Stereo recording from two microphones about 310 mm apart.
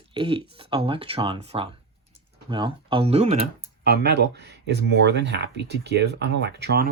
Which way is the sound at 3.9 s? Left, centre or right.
Right.